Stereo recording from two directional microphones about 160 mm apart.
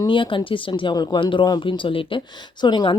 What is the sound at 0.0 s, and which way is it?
Speech, 30° left (ahead or behind).